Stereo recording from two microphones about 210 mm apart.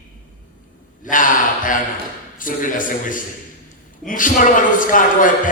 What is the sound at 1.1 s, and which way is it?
A man's voice, 40° left (ahead or behind).